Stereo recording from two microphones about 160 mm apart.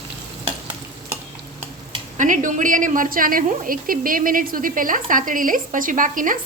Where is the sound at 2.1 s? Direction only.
55° right (ahead or behind).